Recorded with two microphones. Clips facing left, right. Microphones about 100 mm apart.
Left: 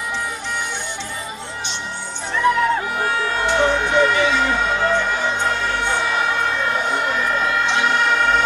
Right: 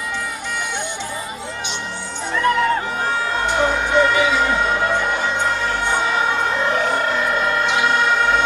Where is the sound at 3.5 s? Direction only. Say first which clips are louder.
Left 1 dB; 10° right (ahead or behind).